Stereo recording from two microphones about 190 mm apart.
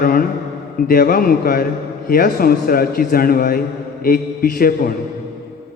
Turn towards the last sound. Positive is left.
turn(degrees=50)  # may be behind; listen again after turning